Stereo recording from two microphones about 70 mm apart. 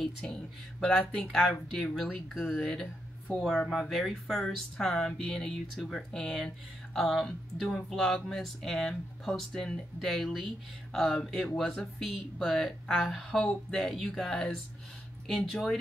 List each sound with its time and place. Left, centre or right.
0.2 s speech: centre